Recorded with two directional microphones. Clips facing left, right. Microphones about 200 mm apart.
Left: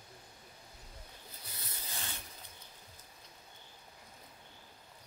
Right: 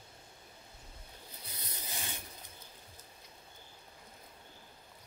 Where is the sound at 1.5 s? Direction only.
20° right (ahead or behind).